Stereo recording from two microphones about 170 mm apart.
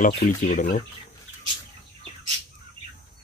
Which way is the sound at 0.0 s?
45° left (ahead or behind).